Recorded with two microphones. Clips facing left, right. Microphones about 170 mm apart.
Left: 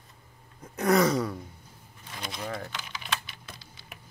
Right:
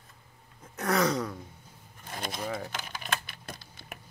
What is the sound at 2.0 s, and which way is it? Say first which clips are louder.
Speech: right 2 dB; 50° right (ahead or behind).